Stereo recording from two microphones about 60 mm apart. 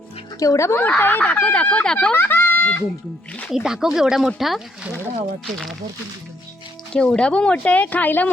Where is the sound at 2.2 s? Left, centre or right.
Left.